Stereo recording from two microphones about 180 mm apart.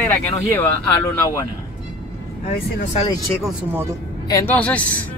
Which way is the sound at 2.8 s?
40° left (ahead or behind).